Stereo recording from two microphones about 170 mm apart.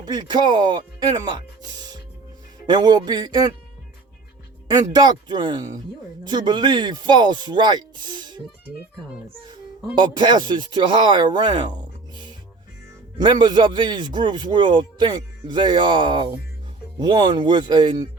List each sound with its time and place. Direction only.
0.0 s a man's voice: 25° right (ahead or behind)
4.7 s a man's voice: 25° right (ahead or behind)
9.5 s a man's voice: 25° right (ahead or behind)
13.1 s a man's voice: 25° right (ahead or behind)